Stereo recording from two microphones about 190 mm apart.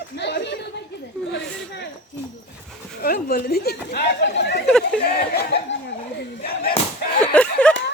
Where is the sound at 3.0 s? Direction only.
55° left (ahead or behind).